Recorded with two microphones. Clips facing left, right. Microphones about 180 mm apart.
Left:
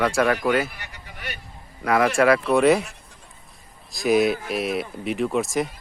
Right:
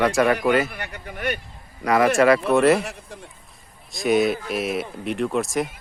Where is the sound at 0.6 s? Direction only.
55° right (ahead or behind).